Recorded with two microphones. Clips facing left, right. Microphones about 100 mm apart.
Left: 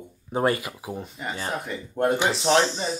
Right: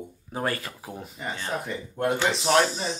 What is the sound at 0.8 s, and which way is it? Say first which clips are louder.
Speech: left 4 dB; 5° left (ahead or behind).